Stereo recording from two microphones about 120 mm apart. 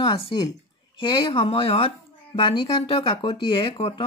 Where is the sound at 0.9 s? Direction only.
40° left (ahead or behind).